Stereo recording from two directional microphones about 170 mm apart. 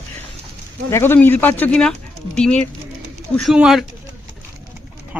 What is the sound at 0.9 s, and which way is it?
A woman's voice, 15° left (ahead or behind).